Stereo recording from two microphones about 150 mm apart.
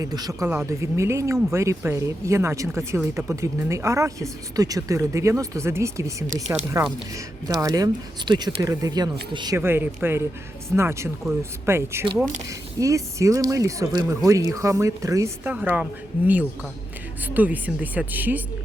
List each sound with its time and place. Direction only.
0.0 s speech: 25° right (ahead or behind)
9.6 s speech: 15° right (ahead or behind)